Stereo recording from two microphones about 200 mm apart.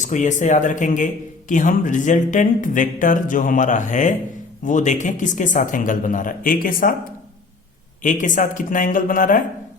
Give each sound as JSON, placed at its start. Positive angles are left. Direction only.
{"t": 0.0, "sound": "a man's voice", "side_deg": 40}
{"t": 8.0, "sound": "a man's voice", "side_deg": 40}